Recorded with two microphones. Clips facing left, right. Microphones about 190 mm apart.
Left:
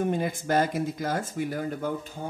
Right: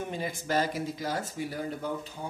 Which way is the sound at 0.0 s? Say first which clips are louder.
Left 7 dB; 50° left (ahead or behind).